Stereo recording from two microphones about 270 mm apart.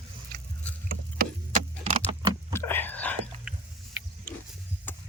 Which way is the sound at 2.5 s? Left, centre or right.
Centre.